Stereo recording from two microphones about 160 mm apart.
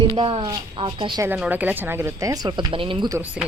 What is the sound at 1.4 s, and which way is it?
Speech, 10° right (ahead or behind).